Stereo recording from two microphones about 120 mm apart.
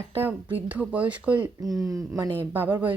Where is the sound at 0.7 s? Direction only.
15° right (ahead or behind).